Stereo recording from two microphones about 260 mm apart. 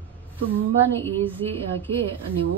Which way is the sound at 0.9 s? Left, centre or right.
Centre.